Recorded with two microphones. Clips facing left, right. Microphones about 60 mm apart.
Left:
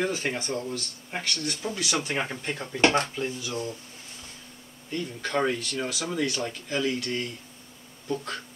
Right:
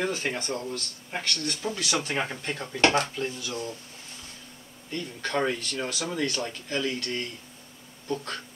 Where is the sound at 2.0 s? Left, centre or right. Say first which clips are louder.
Even; centre.